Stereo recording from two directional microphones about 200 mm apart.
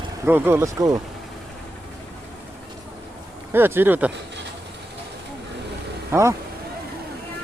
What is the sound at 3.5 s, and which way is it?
Speech, 10° right (ahead or behind).